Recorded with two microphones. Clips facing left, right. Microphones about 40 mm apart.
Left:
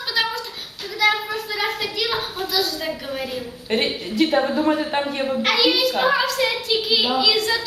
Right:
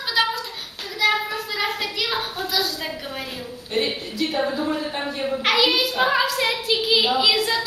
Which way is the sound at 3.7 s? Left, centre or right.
Left.